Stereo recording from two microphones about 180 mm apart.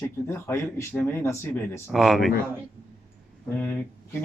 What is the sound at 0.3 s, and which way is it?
Speech, 15° left (ahead or behind).